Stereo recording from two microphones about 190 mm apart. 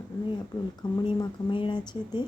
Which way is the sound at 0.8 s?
25° left (ahead or behind).